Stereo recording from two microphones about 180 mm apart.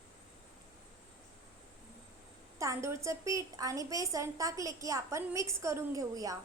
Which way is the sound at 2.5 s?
15° right (ahead or behind).